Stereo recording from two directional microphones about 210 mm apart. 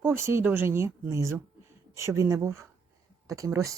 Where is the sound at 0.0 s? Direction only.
10° right (ahead or behind).